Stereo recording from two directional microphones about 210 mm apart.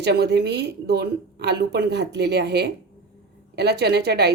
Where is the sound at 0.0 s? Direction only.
50° right (ahead or behind).